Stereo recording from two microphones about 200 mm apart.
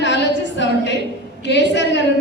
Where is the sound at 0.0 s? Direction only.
60° left (ahead or behind).